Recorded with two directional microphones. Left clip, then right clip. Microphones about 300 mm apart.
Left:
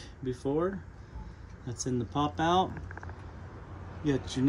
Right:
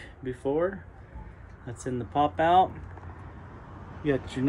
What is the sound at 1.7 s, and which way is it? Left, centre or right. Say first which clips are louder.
Speech: right 1 dB; centre.